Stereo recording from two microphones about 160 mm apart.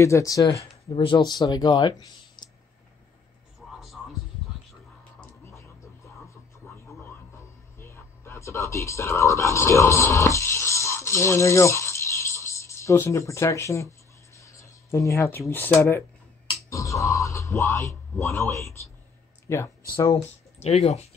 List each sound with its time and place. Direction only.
0.0 s speech: 20° left (ahead or behind)
0.8 s speech: 35° left (ahead or behind)
2.4 s a sound: 25° left (ahead or behind)
5.2 s a sound: 15° left (ahead or behind)
14.3 s speech: 20° left (ahead or behind)
20.2 s speech: 40° left (ahead or behind)